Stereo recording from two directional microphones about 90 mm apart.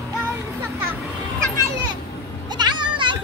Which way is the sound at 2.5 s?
55° right (ahead or behind).